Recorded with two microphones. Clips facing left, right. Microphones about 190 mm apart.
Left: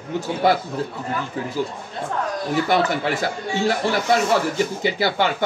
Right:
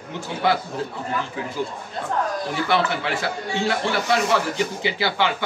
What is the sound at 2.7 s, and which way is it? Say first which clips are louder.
Speech: left 1 dB; 40° left (ahead or behind).